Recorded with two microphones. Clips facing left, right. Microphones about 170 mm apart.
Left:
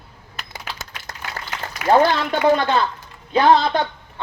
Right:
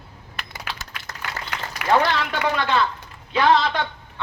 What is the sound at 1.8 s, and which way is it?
A man's voice, 35° left (ahead or behind).